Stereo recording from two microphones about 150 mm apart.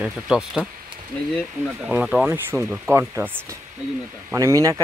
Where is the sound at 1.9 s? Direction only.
5° right (ahead or behind).